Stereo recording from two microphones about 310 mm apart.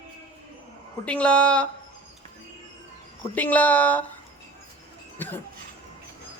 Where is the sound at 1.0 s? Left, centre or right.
Centre.